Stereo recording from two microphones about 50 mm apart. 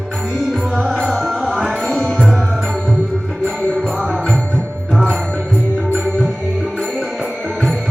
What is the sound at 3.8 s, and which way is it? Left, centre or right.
Music, right.